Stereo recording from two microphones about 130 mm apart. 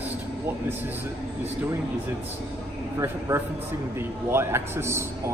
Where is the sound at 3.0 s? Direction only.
20° right (ahead or behind).